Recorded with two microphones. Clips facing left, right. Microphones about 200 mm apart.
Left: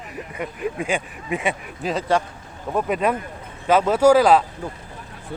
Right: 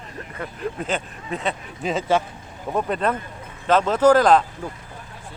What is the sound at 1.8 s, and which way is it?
Speech, centre (ahead or behind).